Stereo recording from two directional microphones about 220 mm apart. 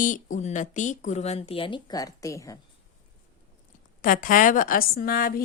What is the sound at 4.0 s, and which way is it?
Speech, 40° left (ahead or behind).